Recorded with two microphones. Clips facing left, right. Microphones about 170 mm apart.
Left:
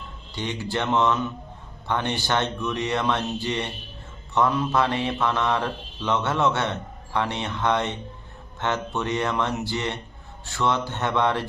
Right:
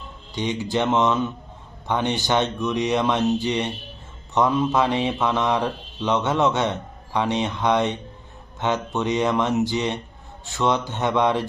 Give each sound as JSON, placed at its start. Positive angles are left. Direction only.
{"t": 0.3, "sound": "mantra", "side_deg": -15}